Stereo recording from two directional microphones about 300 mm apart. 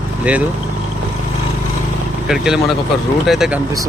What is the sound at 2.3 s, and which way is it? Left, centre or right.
Speech, centre.